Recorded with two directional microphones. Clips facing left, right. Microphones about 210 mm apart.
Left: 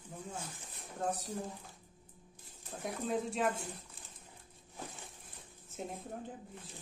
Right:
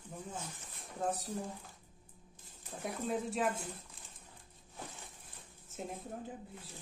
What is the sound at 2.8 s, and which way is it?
Speech, centre (ahead or behind).